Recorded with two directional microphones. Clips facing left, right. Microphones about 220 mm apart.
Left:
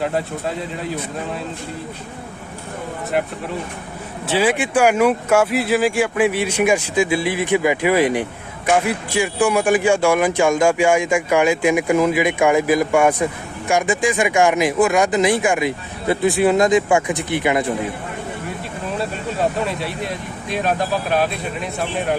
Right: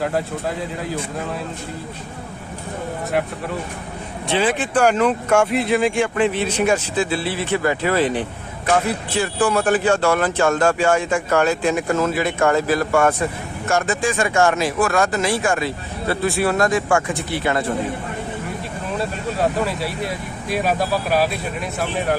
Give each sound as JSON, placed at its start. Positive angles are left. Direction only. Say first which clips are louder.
{"t": 0.0, "sound": "speech", "louder": "even", "side_deg": 0}
{"t": 4.3, "sound": "speech", "louder": "left 2 dB", "side_deg": 10}
{"t": 18.9, "sound": "speech", "louder": "even", "side_deg": 0}